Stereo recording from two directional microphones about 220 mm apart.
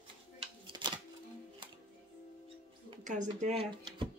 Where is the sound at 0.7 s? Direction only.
20° right (ahead or behind).